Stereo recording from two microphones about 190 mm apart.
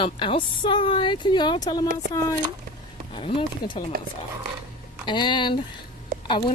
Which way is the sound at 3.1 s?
30° left (ahead or behind).